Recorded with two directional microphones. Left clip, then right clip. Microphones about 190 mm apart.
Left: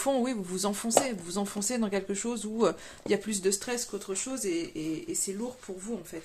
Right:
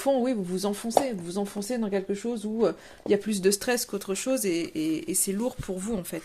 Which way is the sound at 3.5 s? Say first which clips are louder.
Right 6 dB; 40° right (ahead or behind).